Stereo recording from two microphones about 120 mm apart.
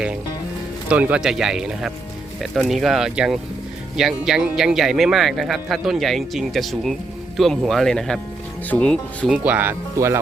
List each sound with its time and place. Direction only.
0.9 s speech: 10° right (ahead or behind); by 9.3 s 10° left (ahead or behind)
9.3 s speech: 15° right (ahead or behind)